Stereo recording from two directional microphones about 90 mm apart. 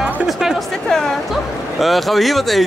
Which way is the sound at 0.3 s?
5° right (ahead or behind).